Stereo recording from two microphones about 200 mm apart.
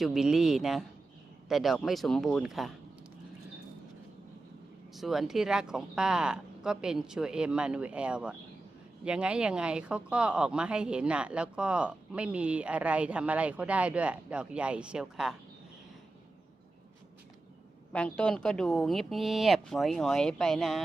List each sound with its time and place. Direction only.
0.0 s speech: centre (ahead or behind)
4.9 s speech: centre (ahead or behind)
17.9 s speech: 5° left (ahead or behind)